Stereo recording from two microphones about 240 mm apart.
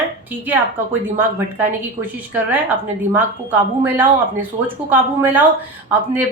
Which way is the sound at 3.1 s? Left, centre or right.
Centre.